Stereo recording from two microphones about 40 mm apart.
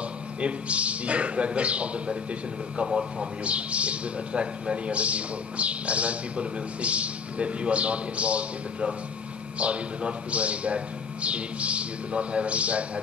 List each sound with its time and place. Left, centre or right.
0.4 s a man's voice: right
2.8 s a man's voice: centre
3.4 s a man's voice: right